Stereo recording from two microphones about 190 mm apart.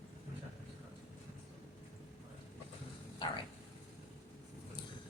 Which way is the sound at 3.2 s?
25° left (ahead or behind).